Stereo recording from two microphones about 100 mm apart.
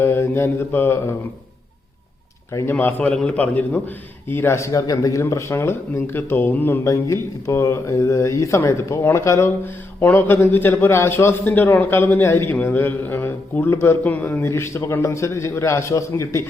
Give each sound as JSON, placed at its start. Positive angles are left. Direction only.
{"t": 0.0, "sound": "speech", "side_deg": 25}
{"t": 2.5, "sound": "speech", "side_deg": 30}
{"t": 2.7, "sound": "speech", "side_deg": 15}
{"t": 6.8, "sound": "speech", "side_deg": 30}